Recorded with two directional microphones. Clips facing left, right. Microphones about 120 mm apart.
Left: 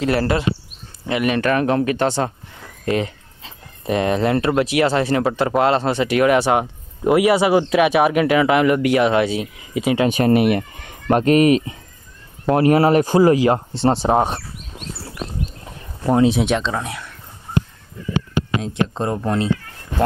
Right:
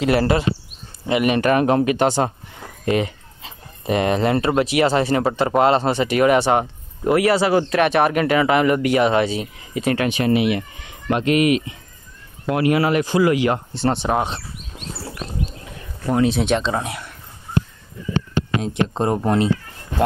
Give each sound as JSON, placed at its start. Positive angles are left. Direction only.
{"t": 0.0, "sound": "speech", "side_deg": -10}
{"t": 7.1, "sound": "speech", "side_deg": 15}
{"t": 10.0, "sound": "speech", "side_deg": 40}
{"t": 16.3, "sound": "speech", "side_deg": 5}
{"t": 18.4, "sound": "a sound", "side_deg": 10}
{"t": 18.9, "sound": "speech", "side_deg": -20}